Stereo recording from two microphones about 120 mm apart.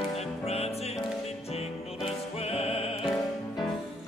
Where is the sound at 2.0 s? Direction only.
55° left (ahead or behind).